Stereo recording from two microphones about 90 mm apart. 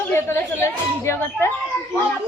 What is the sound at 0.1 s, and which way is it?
Speech, 30° left (ahead or behind).